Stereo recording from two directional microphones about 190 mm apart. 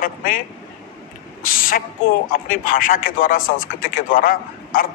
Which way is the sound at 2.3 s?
45° left (ahead or behind).